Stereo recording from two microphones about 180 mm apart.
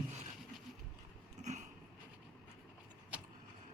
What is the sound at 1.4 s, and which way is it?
Vehicle, 40° right (ahead or behind).